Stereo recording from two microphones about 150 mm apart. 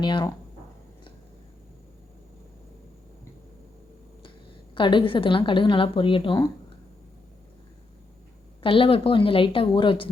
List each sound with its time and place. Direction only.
0.0 s a woman's voice: 30° left (ahead or behind)
4.7 s a woman's voice: 35° left (ahead or behind)
8.6 s a woman's voice: 35° left (ahead or behind)